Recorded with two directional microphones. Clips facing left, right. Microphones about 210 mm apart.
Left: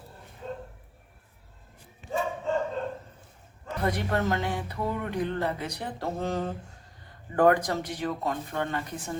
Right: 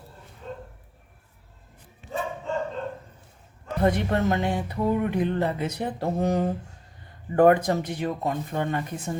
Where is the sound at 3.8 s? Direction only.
25° right (ahead or behind).